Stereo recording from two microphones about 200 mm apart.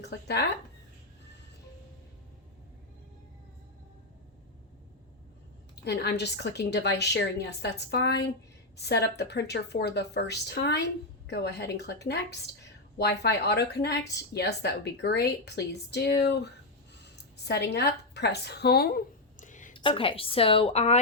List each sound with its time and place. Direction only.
0.0 s a woman's voice: 55° left (ahead or behind)
5.7 s a woman's voice: 55° left (ahead or behind)
17.0 s a sound: 55° left (ahead or behind); by 19.7 s 40° left (ahead or behind)
19.7 s a woman's voice: 25° left (ahead or behind)